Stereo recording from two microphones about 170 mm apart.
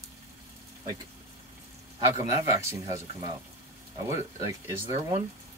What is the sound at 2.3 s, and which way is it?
Speech, 20° right (ahead or behind).